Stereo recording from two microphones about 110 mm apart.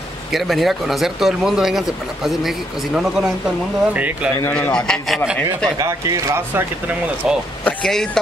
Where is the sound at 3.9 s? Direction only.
15° right (ahead or behind).